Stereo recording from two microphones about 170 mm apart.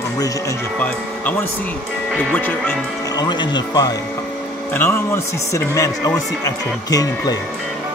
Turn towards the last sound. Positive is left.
turn(degrees=20)  # may be behind; listen again after turning